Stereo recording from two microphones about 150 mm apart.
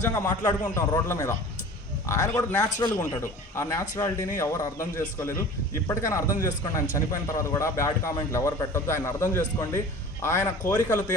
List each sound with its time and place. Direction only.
0.0 s speech: 20° left (ahead or behind)